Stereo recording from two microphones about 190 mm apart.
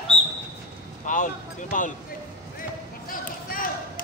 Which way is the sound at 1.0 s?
45° left (ahead or behind).